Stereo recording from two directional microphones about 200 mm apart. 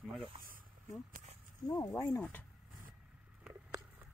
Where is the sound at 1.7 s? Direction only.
20° left (ahead or behind).